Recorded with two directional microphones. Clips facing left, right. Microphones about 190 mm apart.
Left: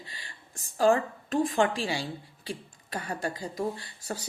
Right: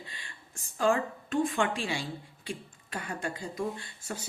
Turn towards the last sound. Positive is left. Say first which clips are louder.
# left 2 dB
turn(degrees=35)  # may be behind; listen again after turning